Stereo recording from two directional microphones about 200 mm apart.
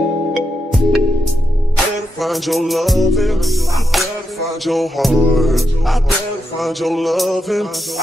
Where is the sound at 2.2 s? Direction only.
Centre (ahead or behind).